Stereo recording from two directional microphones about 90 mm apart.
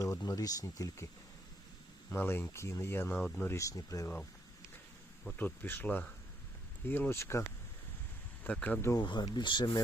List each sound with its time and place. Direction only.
0.2 s speech: 40° left (ahead or behind)
2.0 s speech: 25° left (ahead or behind)
3.6 s speech: 40° left (ahead or behind)
5.2 s speech: 25° left (ahead or behind)
8.4 s speech: 15° left (ahead or behind)
9.0 s speech: 50° left (ahead or behind)